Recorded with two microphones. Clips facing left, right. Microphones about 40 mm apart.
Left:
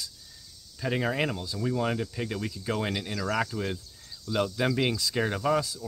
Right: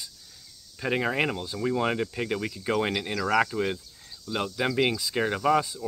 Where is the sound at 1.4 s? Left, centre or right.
Right.